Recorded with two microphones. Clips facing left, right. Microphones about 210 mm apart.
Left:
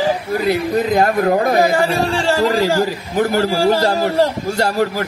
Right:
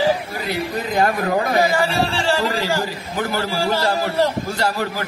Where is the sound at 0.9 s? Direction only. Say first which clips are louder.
Left 3 dB; 45° left (ahead or behind).